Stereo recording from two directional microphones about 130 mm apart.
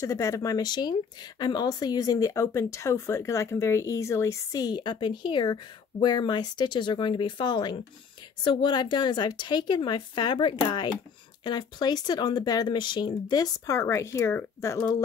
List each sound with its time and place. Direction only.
0.0 s speech: 25° left (ahead or behind)